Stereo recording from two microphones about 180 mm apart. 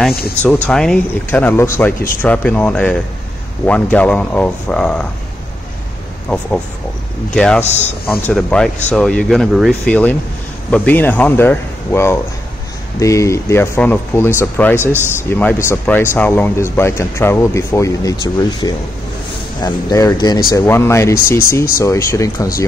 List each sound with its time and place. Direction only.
0.4 s speech: 5° left (ahead or behind)
6.2 s speech: 5° left (ahead or behind)
7.6 s speech: 40° left (ahead or behind)
8.1 s speech: 5° left (ahead or behind)
14.8 s a man's voice: 10° right (ahead or behind)
15.2 s speech: 10° left (ahead or behind)